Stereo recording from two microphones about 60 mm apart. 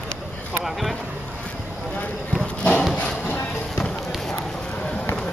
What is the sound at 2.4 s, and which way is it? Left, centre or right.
Horse, left.